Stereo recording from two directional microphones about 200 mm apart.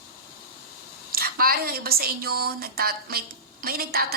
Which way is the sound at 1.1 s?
50° right (ahead or behind).